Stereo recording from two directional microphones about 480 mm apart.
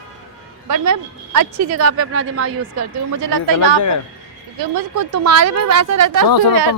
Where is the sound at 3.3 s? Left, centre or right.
Right.